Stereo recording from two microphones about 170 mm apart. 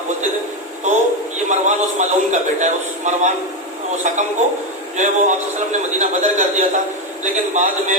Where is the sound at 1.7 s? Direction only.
45° right (ahead or behind).